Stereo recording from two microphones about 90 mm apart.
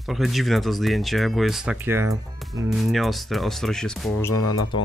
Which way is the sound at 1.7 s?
25° right (ahead or behind).